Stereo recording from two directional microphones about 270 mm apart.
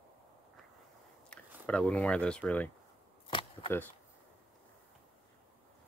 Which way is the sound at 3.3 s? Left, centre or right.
Centre.